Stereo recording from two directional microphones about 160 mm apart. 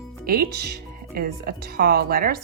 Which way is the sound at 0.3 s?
75° right (ahead or behind).